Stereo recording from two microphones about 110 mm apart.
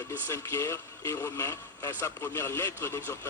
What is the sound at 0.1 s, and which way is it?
Speech, 25° left (ahead or behind).